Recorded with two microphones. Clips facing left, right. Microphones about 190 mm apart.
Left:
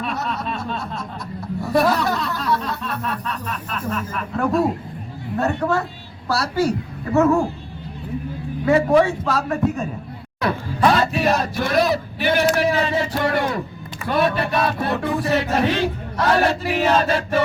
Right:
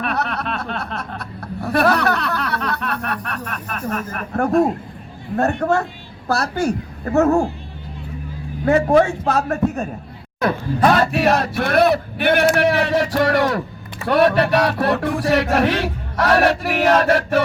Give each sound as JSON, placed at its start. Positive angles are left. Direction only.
{"t": 0.0, "sound": "snicker", "side_deg": -65}
{"t": 5.4, "sound": "a woman's voice", "side_deg": -55}
{"t": 8.6, "sound": "a woman's voice", "side_deg": -45}
{"t": 14.1, "sound": "a sound", "side_deg": -70}